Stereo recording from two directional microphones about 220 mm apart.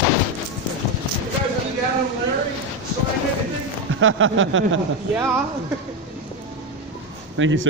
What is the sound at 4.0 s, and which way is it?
Speech, 65° right (ahead or behind).